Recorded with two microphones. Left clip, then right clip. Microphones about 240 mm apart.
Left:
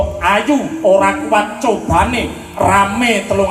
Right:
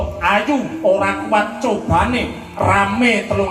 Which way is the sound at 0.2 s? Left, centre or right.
Left.